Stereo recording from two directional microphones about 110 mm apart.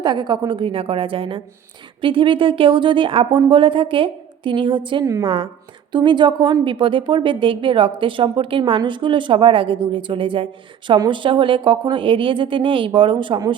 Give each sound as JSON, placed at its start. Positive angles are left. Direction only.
{"t": 0.0, "sound": "a woman's voice", "side_deg": -40}